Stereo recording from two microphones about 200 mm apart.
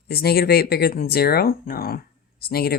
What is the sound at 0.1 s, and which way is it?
Speech, 50° left (ahead or behind).